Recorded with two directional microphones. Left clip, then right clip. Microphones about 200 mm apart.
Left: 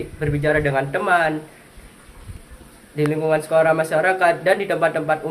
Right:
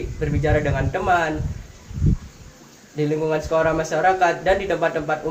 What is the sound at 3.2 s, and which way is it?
Speech, 20° left (ahead or behind).